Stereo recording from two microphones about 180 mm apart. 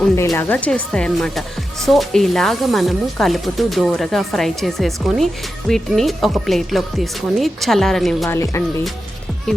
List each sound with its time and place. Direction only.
0.3 s speech: 10° left (ahead or behind)
8.3 s speech: 15° left (ahead or behind)